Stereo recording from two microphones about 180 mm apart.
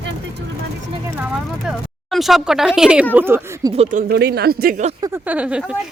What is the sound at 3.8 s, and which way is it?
Speech, 45° right (ahead or behind).